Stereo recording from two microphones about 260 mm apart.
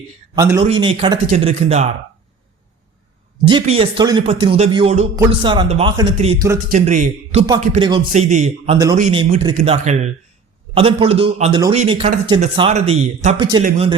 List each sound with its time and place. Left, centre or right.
0.3 s a man's voice: centre
3.4 s speech: centre